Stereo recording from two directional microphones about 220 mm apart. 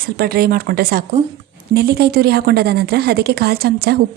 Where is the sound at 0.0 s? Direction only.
45° right (ahead or behind).